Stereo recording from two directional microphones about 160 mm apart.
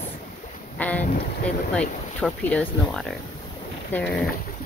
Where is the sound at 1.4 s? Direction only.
5° left (ahead or behind).